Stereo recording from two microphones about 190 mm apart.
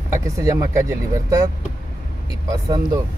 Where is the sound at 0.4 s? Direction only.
15° right (ahead or behind).